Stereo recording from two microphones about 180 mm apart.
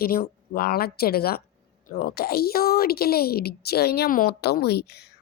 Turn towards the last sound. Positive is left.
turn(degrees=65)  # may be behind; listen again after turning